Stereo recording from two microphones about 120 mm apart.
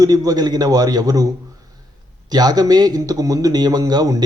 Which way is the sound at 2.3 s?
35° right (ahead or behind).